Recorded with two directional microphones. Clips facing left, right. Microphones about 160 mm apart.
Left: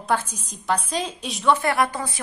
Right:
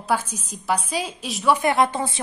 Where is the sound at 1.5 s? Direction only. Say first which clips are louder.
Right 4 dB; 20° right (ahead or behind).